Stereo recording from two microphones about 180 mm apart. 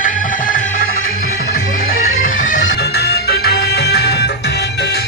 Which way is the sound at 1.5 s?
50° left (ahead or behind).